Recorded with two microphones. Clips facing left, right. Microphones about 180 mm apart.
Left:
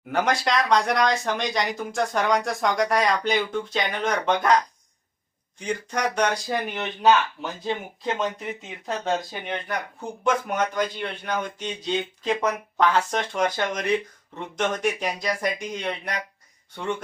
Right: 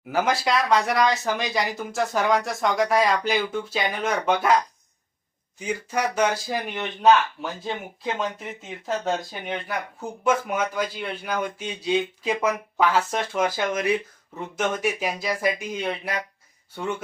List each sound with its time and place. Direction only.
0.1 s speech: 5° right (ahead or behind)
5.5 s speech: 5° right (ahead or behind)